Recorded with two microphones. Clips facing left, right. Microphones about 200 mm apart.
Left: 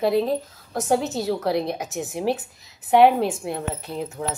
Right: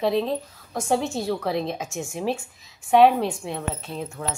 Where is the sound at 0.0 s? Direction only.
10° left (ahead or behind).